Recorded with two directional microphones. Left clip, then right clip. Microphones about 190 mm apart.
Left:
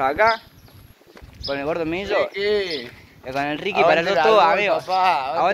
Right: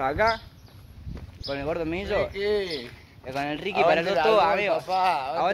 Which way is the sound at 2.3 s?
35° right (ahead or behind).